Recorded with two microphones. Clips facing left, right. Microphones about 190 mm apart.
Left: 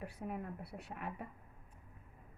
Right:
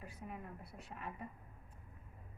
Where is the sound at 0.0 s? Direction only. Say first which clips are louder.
Left 6 dB; 65° left (ahead or behind).